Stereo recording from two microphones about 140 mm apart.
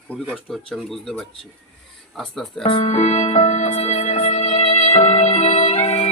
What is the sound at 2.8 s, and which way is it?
Music, 50° left (ahead or behind).